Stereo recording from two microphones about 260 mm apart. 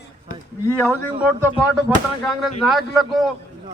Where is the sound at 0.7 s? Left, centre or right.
Centre.